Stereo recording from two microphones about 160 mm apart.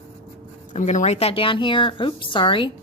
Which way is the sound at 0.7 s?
50° left (ahead or behind).